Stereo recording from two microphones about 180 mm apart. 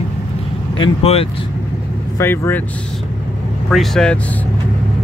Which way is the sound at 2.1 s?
15° left (ahead or behind).